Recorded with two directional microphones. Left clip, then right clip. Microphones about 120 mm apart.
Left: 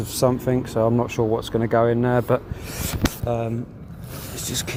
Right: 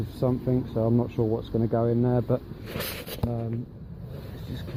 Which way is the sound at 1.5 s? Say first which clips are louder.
Left 5 dB; 5° right (ahead or behind).